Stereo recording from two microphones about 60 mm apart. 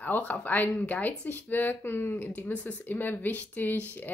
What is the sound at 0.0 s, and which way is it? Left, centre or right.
Speech, left.